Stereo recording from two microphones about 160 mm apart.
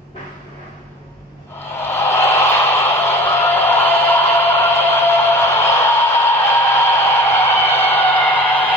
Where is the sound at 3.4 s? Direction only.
10° left (ahead or behind).